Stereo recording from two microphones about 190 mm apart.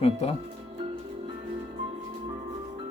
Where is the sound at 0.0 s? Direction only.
30° left (ahead or behind).